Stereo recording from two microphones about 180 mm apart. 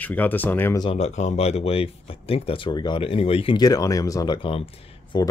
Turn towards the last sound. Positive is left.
turn(degrees=25)  # may be behind; listen again after turning